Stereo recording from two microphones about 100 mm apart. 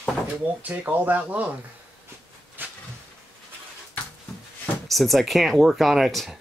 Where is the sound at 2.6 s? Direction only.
20° right (ahead or behind).